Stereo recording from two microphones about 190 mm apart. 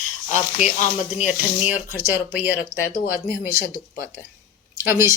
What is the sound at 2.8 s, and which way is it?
Speech, 50° left (ahead or behind).